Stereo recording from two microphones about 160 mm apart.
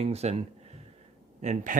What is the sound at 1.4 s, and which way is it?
Speech, 50° right (ahead or behind).